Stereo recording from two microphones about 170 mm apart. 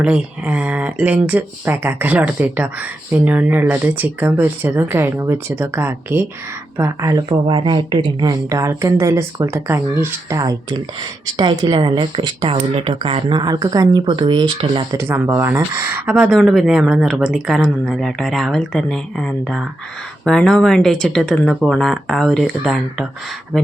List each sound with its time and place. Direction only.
0.0 s speech: 10° right (ahead or behind); by 14.8 s 30° right (ahead or behind)
14.9 s speech: 15° right (ahead or behind); by 23.7 s centre (ahead or behind)